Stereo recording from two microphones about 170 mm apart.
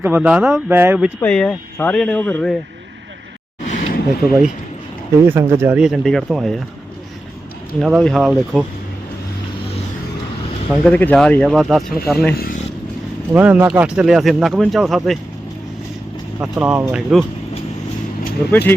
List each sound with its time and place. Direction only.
0.0 s speech: 10° right (ahead or behind)
1.2 s speech: 5° left (ahead or behind)
3.7 s a sound: 60° left (ahead or behind)
4.2 s speech: centre (ahead or behind)
5.2 s speech: 15° right (ahead or behind)
7.8 s speech: centre (ahead or behind)
10.8 s speech: 10° left (ahead or behind)
13.3 s speech: 10° right (ahead or behind)
16.4 s speech: 5° right (ahead or behind)